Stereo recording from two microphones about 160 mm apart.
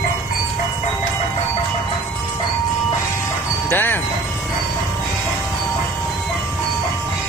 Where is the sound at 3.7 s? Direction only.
15° left (ahead or behind).